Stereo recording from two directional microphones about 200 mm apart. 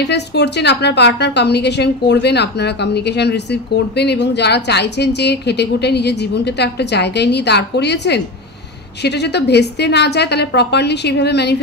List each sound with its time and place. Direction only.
0.0 s a woman's voice: 60° left (ahead or behind)